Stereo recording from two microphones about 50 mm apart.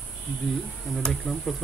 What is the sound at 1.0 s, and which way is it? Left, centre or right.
Speech, centre.